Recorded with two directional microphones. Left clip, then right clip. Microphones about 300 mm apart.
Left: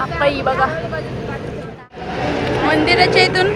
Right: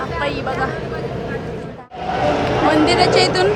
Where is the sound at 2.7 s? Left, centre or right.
Centre.